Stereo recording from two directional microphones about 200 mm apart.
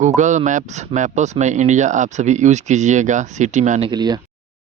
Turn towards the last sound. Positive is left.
turn(degrees=-20)  # may be behind; listen again after turning